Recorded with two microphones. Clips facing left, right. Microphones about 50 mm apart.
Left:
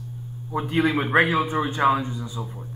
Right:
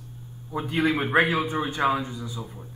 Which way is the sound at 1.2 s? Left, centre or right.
Left.